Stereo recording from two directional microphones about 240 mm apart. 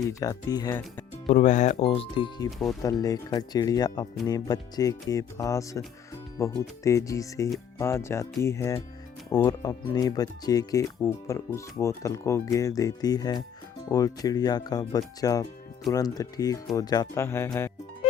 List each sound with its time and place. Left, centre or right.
0.1 s speech: centre
1.3 s speech: left; by 17.7 s centre